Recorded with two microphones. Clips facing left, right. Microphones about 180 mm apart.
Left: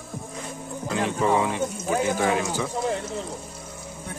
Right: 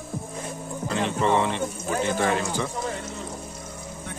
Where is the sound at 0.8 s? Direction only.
5° left (ahead or behind).